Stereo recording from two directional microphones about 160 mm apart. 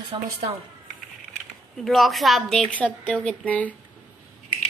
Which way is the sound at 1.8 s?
Centre (ahead or behind).